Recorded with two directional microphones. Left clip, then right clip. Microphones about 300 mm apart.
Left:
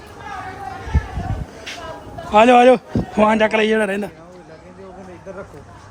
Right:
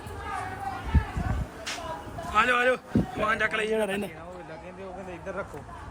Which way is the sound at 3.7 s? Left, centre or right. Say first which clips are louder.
Left 8 dB; left.